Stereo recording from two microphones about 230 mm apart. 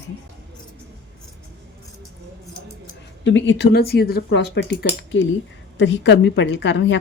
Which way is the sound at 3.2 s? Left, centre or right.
Left.